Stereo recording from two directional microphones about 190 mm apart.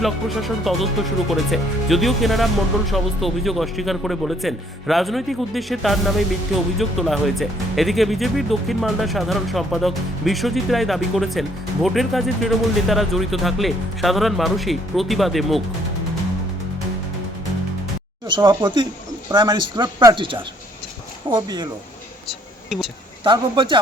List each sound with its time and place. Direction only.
0.0 s speech: centre (ahead or behind)
18.3 s speech: 25° right (ahead or behind)
23.2 s speech: 25° right (ahead or behind)